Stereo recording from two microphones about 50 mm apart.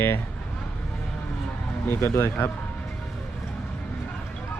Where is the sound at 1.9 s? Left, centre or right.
Left.